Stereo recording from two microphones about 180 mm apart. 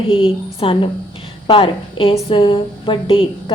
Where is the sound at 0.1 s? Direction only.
30° left (ahead or behind).